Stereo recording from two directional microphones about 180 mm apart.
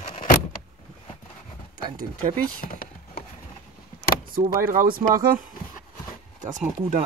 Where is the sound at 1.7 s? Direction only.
25° right (ahead or behind).